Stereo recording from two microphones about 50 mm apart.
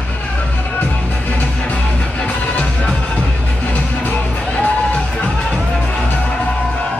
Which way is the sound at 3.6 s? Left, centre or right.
Left.